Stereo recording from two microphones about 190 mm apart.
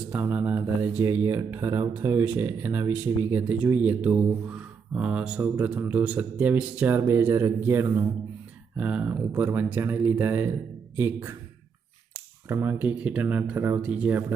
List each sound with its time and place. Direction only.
0.0 s speech: 10° right (ahead or behind)